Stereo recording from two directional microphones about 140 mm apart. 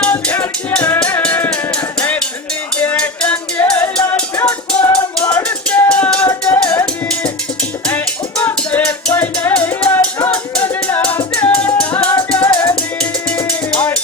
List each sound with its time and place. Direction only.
0.0 s music: 10° left (ahead or behind)
2.8 s music: 10° left (ahead or behind)